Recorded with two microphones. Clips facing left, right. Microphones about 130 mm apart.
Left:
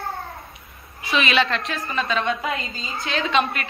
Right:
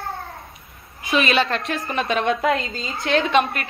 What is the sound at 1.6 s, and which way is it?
A woman's voice, 65° right (ahead or behind).